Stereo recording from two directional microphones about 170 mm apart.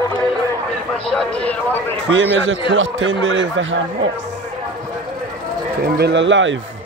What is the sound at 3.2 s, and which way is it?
Speech, 90° right.